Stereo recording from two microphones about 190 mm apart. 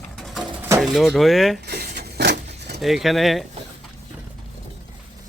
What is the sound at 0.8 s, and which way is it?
Speech, centre (ahead or behind).